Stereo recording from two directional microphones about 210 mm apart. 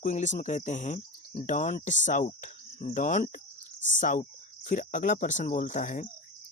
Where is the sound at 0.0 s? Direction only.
35° left (ahead or behind).